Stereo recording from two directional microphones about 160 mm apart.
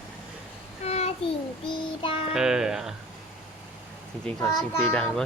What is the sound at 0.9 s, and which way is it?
Child singing, 40° left (ahead or behind).